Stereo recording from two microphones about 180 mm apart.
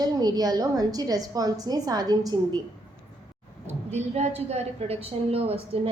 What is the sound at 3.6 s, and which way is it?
A woman's voice, 35° right (ahead or behind).